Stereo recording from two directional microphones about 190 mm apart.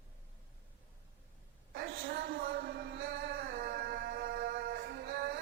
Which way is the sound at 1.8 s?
55° right (ahead or behind).